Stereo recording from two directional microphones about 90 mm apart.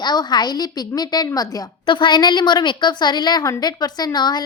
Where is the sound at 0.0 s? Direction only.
50° left (ahead or behind).